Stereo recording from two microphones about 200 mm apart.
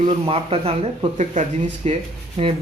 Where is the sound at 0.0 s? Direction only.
30° right (ahead or behind).